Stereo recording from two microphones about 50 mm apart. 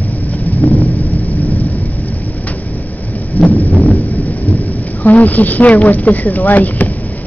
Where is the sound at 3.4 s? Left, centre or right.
Left.